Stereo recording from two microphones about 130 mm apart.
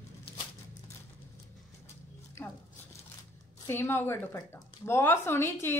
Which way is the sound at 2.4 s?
20° left (ahead or behind).